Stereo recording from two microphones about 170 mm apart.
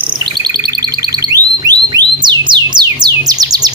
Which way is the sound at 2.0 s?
25° right (ahead or behind).